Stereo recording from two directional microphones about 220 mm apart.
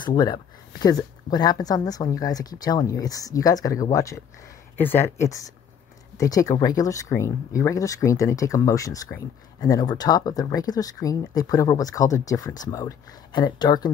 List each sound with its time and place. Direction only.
0.0 s speech: 20° left (ahead or behind)
6.1 s speech: 15° left (ahead or behind)